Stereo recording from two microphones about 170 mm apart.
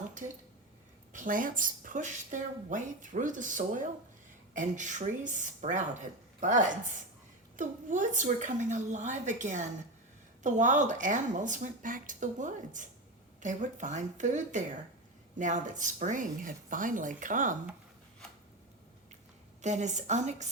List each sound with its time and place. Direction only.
1.1 s speech: 50° right (ahead or behind)
19.6 s speech: 45° right (ahead or behind)